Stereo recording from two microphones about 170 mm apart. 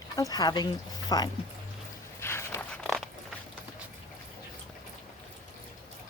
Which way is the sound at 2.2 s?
15° left (ahead or behind).